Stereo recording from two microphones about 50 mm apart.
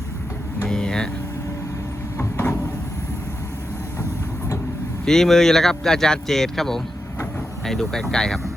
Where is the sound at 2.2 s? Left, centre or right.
Left.